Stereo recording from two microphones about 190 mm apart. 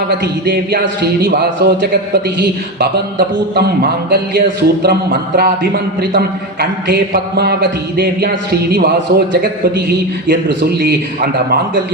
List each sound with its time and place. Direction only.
0.4 s a man's voice: 55° right (ahead or behind)
10.8 s a man's voice: 55° right (ahead or behind)